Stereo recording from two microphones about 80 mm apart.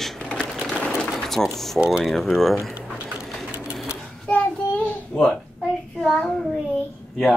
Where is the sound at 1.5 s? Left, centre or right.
Centre.